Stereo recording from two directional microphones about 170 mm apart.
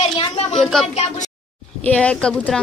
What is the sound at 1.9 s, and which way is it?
Speech, 5° left (ahead or behind).